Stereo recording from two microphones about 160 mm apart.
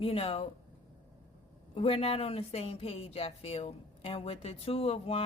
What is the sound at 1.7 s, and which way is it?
Speech, 40° left (ahead or behind).